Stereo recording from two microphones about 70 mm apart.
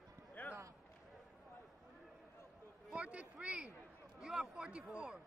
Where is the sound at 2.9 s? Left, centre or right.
Centre.